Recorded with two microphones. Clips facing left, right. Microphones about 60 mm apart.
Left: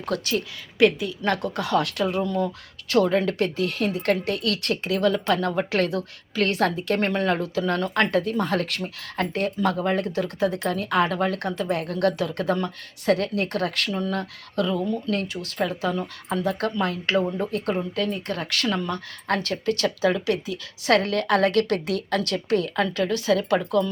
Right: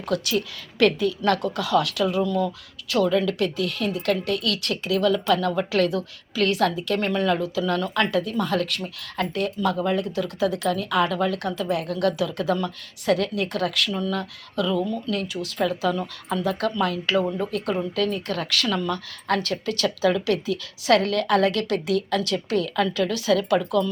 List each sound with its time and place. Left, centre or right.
0.0 s a woman's voice: left
0.8 s a woman's voice: centre
15.1 s a woman's voice: left